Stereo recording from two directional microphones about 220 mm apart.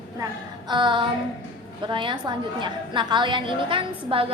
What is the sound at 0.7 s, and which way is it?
A woman's voice, 20° right (ahead or behind).